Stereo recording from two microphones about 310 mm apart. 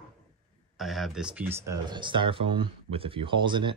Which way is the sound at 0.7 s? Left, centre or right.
Centre.